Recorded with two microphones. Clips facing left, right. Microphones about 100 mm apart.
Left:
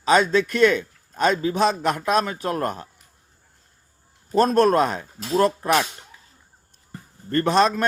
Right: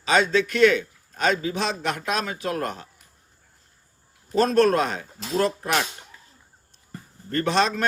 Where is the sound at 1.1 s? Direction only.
45° left (ahead or behind).